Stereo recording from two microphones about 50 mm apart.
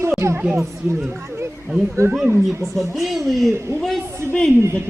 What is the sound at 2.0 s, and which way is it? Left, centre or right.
Speech, right.